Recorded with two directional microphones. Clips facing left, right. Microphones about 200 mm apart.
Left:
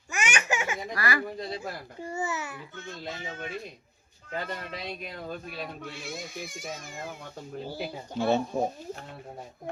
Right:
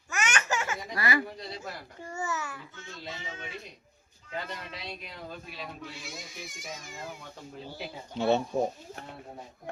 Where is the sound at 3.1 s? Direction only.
55° left (ahead or behind).